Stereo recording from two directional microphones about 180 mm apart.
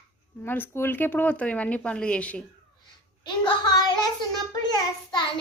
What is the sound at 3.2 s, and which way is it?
Child singing, 25° left (ahead or behind).